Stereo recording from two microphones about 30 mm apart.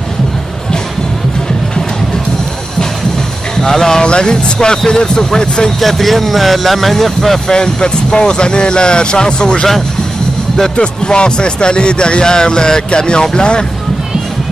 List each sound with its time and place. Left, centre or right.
3.6 s speech: centre
4.0 s speech: left
5.8 s speech: centre
7.4 s speech: left
10.8 s speech: left